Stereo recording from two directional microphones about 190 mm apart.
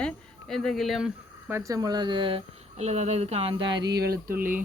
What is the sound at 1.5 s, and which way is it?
Speech, 15° right (ahead or behind).